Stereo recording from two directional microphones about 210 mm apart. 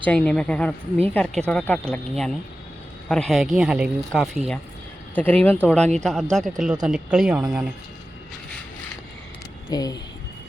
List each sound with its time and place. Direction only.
0.0 s speech: 5° left (ahead or behind)
9.6 s speech: 20° left (ahead or behind)